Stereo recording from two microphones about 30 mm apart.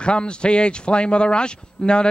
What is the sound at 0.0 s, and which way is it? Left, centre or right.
Speech, left.